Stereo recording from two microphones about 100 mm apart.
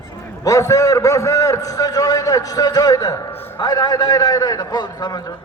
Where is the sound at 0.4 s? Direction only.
35° left (ahead or behind).